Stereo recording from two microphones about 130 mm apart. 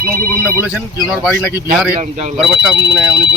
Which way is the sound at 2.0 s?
60° right (ahead or behind).